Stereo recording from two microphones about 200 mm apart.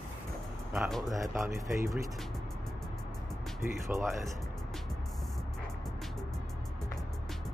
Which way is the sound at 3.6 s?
10° right (ahead or behind).